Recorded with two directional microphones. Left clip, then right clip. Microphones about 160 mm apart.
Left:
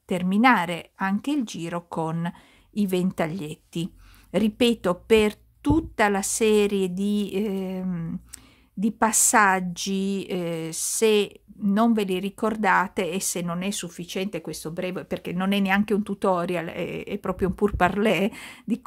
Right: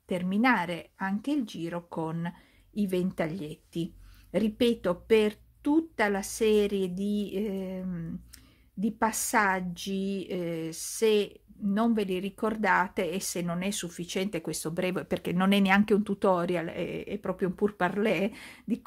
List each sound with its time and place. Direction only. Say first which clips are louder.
0.1 s a woman's voice: left 6 dB; 30° left (ahead or behind)